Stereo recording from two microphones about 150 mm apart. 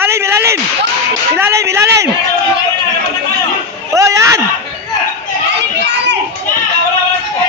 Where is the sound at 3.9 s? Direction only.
20° right (ahead or behind).